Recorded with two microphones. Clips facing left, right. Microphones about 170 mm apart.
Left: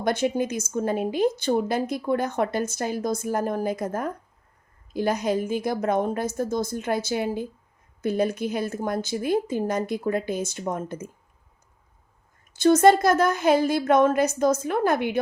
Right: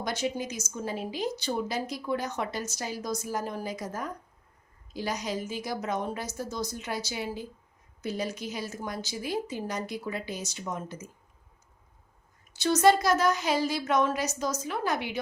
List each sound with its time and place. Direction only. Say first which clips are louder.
0.0 s speech: left 8 dB; 55° left (ahead or behind)
12.5 s speech: left 6 dB; 50° left (ahead or behind)